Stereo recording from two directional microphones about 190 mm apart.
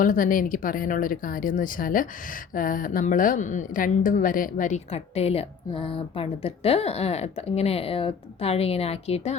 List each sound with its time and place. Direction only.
0.0 s speech: 45° left (ahead or behind)